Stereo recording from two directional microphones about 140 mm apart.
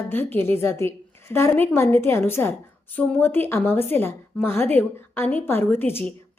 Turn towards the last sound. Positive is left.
turn(degrees=15)  # may be behind; listen again after turning